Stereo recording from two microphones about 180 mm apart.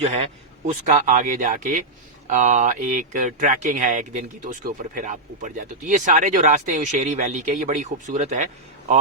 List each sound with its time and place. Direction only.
0.0 s a man's voice: 35° right (ahead or behind)